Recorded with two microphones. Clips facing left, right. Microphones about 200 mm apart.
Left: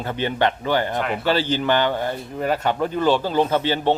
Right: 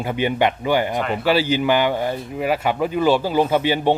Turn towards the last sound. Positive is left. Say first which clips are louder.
# right 2 dB
turn(degrees=-10)  # may be behind; listen again after turning